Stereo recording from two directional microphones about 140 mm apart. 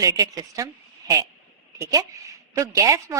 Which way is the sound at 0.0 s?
25° right (ahead or behind).